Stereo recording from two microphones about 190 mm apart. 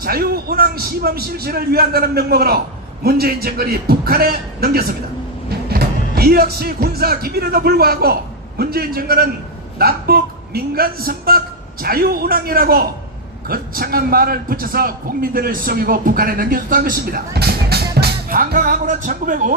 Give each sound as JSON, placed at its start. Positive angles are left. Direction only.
{"t": 0.0, "sound": "a man's voice", "side_deg": -50}